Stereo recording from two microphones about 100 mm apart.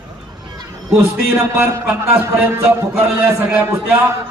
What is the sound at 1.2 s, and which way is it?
A man's voice, 25° right (ahead or behind).